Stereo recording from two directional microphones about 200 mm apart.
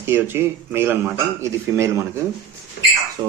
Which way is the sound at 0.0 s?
10° right (ahead or behind).